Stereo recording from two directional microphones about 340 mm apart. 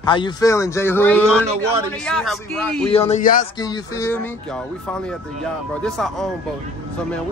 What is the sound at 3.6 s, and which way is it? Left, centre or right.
Speech, centre.